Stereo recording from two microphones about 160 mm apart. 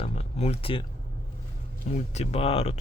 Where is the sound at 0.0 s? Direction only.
40° left (ahead or behind).